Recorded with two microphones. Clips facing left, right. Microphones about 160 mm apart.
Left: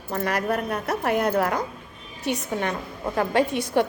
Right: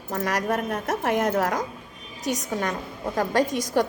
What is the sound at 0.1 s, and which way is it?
A woman's voice, 40° right (ahead or behind).